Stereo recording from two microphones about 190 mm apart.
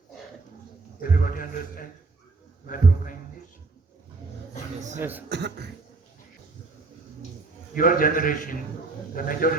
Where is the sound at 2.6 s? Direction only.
45° left (ahead or behind).